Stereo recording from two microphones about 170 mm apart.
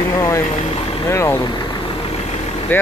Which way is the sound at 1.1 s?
15° left (ahead or behind).